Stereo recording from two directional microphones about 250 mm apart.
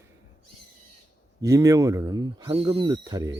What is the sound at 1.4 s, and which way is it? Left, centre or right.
Speech, centre.